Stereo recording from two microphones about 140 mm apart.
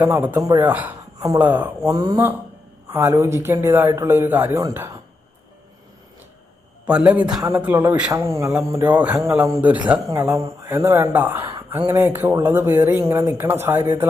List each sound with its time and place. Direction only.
0.0 s speech: 15° right (ahead or behind)
1.8 s speech: 25° right (ahead or behind)
6.8 s speech: 10° right (ahead or behind)
10.1 s speech: 25° right (ahead or behind)